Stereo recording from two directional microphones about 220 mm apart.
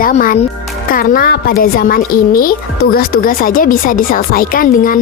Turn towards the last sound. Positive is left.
turn(degrees=40)  # may be behind; listen again after turning